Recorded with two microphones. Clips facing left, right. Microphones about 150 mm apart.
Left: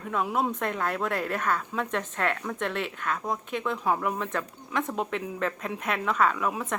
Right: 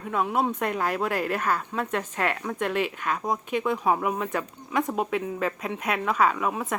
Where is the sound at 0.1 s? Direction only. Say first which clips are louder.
Right 2 dB; 5° right (ahead or behind).